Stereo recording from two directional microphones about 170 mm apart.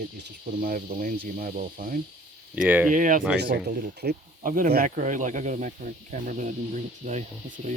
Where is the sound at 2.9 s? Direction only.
50° right (ahead or behind).